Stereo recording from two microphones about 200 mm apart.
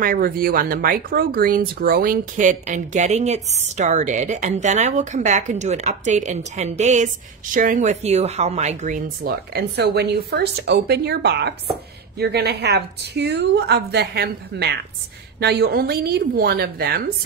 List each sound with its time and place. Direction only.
0.0 s a woman's voice: 45° right (ahead or behind)